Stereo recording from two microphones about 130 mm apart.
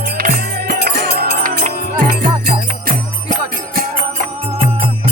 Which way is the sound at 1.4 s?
90° right.